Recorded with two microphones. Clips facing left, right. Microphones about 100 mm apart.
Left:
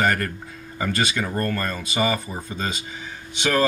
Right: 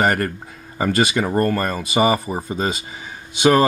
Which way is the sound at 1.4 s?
20° right (ahead or behind).